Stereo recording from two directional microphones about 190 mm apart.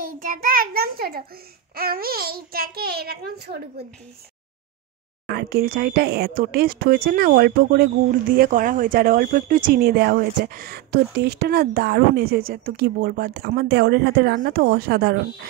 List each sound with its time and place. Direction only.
0.2 s a child's voice: 45° right (ahead or behind)
5.2 s speech: 55° right (ahead or behind)